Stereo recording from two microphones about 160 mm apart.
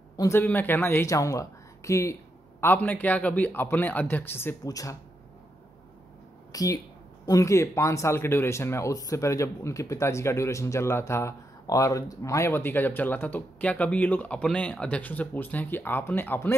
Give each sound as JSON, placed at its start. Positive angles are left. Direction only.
{"t": 0.2, "sound": "speech", "side_deg": 15}
{"t": 6.5, "sound": "speech", "side_deg": 20}